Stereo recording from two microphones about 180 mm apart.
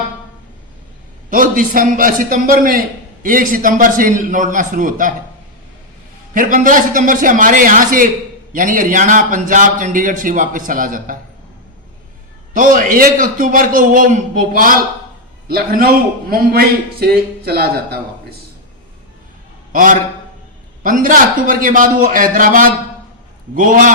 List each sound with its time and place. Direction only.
1.3 s a man's voice: 50° right (ahead or behind)
6.3 s a man's voice: 50° right (ahead or behind)
12.5 s a man's voice: 50° right (ahead or behind)
19.7 s a man's voice: 50° right (ahead or behind)